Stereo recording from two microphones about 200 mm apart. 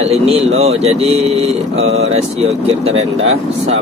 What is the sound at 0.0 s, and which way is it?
Speech, 30° right (ahead or behind).